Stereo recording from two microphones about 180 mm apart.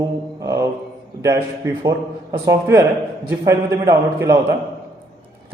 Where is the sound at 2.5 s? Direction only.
15° right (ahead or behind).